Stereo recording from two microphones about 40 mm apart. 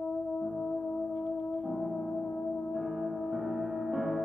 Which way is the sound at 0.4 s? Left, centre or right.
Centre.